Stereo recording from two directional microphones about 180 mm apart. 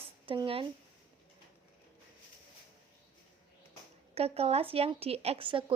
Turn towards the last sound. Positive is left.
turn(degrees=-30)  # may be behind; listen again after turning